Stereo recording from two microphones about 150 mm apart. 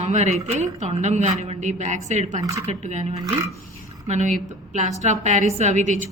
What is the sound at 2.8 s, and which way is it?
A woman's voice, 50° right (ahead or behind).